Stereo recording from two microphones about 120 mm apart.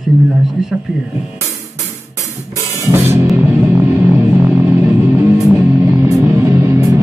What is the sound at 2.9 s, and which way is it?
Music, 20° right (ahead or behind).